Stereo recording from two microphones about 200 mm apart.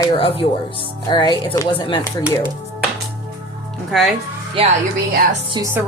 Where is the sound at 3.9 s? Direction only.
Centre (ahead or behind).